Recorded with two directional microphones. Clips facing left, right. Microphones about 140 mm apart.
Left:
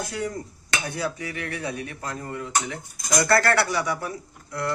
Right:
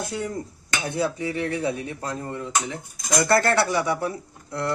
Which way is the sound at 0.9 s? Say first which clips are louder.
Right 7 dB; 25° right (ahead or behind).